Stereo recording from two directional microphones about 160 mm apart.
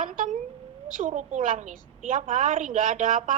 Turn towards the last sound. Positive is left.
turn(degrees=-55)  # may be behind; listen again after turning